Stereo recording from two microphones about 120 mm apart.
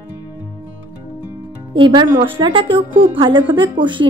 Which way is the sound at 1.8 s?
45° right (ahead or behind).